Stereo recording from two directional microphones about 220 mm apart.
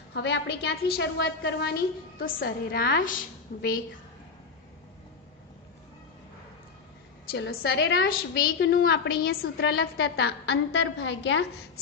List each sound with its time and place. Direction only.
0.1 s a woman's voice: 50° left (ahead or behind)
7.3 s a woman's voice: 50° left (ahead or behind)